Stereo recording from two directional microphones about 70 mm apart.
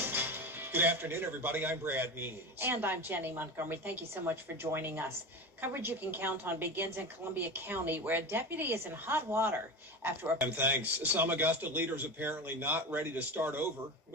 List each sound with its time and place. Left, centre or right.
0.0 s a man's voice: right